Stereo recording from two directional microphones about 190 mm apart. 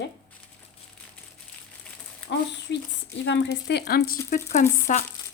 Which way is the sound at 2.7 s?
70° left (ahead or behind).